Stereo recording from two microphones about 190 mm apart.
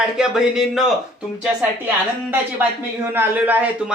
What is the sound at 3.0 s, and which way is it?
Speech, 10° right (ahead or behind).